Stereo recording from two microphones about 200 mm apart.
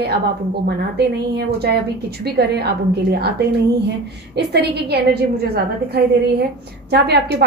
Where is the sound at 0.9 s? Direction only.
55° right (ahead or behind).